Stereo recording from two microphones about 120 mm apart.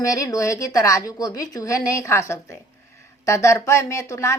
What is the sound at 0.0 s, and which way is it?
A woman's voice, 30° left (ahead or behind).